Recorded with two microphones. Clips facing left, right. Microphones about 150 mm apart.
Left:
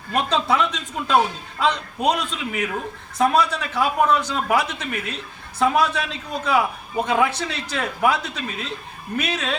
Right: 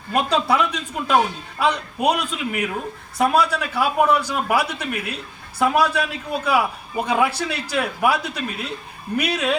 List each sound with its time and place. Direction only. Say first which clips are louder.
0.1 s a man's voice: right 1 dB; 10° right (ahead or behind)